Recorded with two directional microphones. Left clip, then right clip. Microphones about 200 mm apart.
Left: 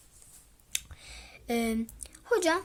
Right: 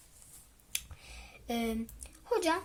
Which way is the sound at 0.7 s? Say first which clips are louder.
Left 4 dB; 15° left (ahead or behind).